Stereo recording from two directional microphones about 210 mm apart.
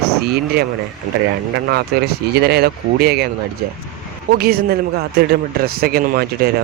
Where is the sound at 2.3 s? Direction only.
50° right (ahead or behind).